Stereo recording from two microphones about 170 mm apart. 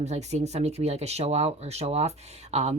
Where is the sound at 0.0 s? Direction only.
40° right (ahead or behind).